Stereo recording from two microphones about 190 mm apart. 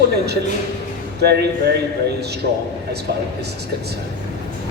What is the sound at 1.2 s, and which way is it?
Speech, 60° right (ahead or behind).